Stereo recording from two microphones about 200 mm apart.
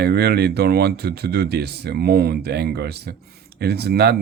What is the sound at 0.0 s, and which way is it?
Speech, 55° right (ahead or behind).